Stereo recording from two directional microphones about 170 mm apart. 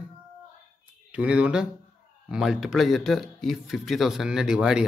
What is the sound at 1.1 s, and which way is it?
Speech, 5° right (ahead or behind).